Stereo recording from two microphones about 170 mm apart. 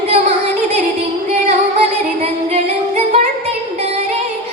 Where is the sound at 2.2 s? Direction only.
40° right (ahead or behind).